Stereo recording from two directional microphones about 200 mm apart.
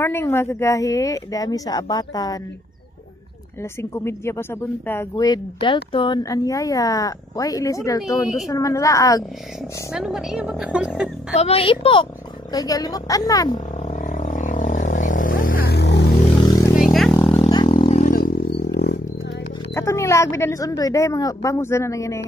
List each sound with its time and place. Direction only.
0.0 s speech: 10° left (ahead or behind)
3.9 s speech: 15° left (ahead or behind)
9.9 s speech: centre (ahead or behind)
11.3 s a woman's voice: 30° left (ahead or behind)
13.8 s vehicle: 40° left (ahead or behind); by 16.0 s 55° left (ahead or behind)
16.4 s vehicle: 20° left (ahead or behind)
16.7 s vehicle: centre (ahead or behind)
17.4 s a sound: 20° left (ahead or behind)
18.0 s roaring cats: 45° left (ahead or behind)
19.7 s speech: 15° left (ahead or behind)